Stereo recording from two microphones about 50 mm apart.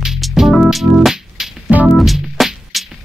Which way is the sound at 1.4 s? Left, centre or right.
Centre.